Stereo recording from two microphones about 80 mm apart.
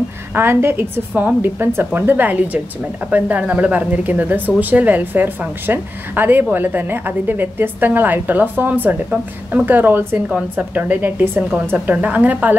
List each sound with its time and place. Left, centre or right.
0.3 s a woman's voice: right